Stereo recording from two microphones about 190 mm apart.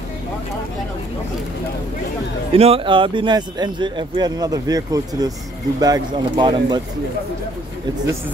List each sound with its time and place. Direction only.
2.5 s speech: 30° right (ahead or behind)